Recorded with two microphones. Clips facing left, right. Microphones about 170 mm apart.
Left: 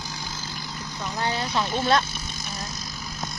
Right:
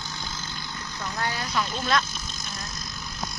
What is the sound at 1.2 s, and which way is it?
Speech, 25° left (ahead or behind).